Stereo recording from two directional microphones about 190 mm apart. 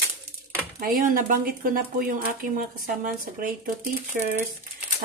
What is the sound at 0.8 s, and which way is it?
Speech, 45° right (ahead or behind).